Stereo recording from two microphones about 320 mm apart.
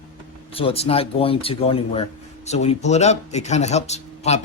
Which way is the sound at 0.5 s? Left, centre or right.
Centre.